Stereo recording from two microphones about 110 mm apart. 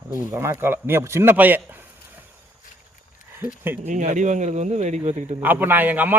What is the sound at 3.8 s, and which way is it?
Speech, 90° right.